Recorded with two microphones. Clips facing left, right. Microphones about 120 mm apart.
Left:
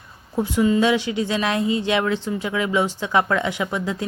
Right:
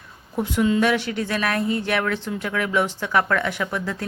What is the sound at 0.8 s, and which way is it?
Speech, 15° left (ahead or behind).